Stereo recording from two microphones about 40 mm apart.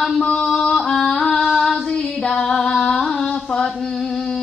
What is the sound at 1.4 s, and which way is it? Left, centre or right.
Child singing, centre.